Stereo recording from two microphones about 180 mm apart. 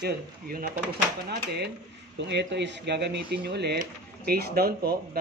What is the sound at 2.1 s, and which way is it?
Speech, 70° right (ahead or behind).